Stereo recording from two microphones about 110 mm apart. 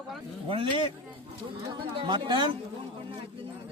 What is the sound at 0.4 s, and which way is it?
Speech, 50° right (ahead or behind).